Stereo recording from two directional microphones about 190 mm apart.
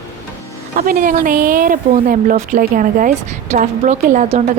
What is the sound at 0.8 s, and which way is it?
A woman's voice, 45° right (ahead or behind).